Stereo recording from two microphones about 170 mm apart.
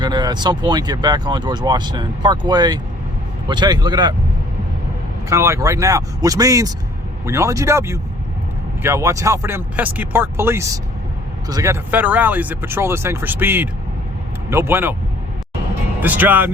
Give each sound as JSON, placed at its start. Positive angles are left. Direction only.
{"t": 0.0, "sound": "speech", "side_deg": -25}
{"t": 5.3, "sound": "speech", "side_deg": -15}
{"t": 16.0, "sound": "speech", "side_deg": -10}